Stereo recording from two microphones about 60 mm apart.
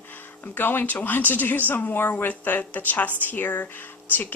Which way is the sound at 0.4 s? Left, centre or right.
Left.